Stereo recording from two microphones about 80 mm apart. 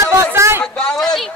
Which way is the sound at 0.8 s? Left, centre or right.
Centre.